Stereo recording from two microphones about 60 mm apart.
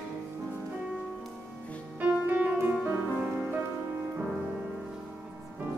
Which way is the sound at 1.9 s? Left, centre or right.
Right.